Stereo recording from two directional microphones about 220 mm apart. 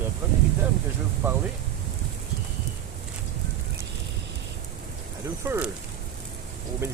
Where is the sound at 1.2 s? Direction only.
10° right (ahead or behind).